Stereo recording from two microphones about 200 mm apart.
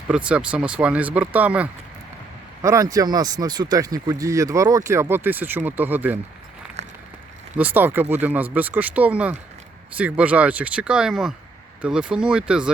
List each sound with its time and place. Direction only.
0.1 s speech: 5° right (ahead or behind)
6.8 s a sound: 35° right (ahead or behind)
7.5 s speech: 10° right (ahead or behind)